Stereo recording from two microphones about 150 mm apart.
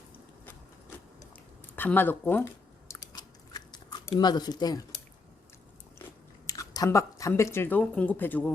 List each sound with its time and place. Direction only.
1.7 s chewing: 15° left (ahead or behind)
4.2 s speech: 30° left (ahead or behind)
6.5 s speech: 20° left (ahead or behind)